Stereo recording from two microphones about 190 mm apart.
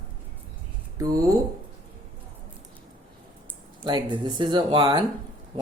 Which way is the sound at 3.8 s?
25° right (ahead or behind).